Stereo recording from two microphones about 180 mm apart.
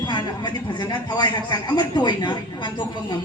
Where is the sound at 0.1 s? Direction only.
25° left (ahead or behind).